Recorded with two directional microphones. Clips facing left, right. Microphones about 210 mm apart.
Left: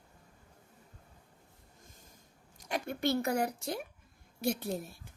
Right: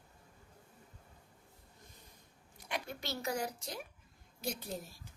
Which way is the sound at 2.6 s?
45° left (ahead or behind).